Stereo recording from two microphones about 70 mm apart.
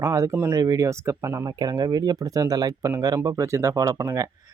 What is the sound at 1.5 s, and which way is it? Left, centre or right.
Speech, right.